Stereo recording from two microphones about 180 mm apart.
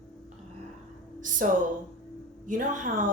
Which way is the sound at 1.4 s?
50° right (ahead or behind).